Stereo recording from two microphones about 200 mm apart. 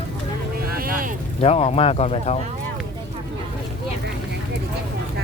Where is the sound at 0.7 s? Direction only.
45° right (ahead or behind).